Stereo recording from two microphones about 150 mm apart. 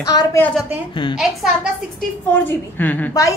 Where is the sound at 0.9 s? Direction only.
30° left (ahead or behind).